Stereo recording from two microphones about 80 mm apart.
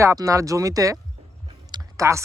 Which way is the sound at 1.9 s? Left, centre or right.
Right.